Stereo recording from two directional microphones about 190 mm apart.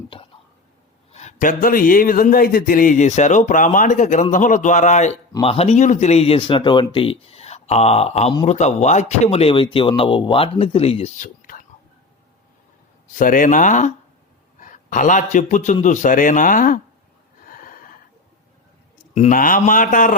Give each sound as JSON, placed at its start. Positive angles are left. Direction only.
{"t": 0.1, "sound": "whispering", "side_deg": 30}
{"t": 1.1, "sound": "a man's voice", "side_deg": 40}
{"t": 13.1, "sound": "a man's voice", "side_deg": 45}
{"t": 17.4, "sound": "snort", "side_deg": 45}
{"t": 19.1, "sound": "a man's voice", "side_deg": 40}